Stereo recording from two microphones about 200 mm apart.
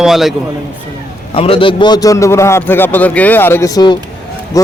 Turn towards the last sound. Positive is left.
turn(degrees=15)  # may be behind; listen again after turning